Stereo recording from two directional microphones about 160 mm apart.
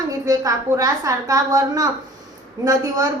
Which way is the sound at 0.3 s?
20° right (ahead or behind).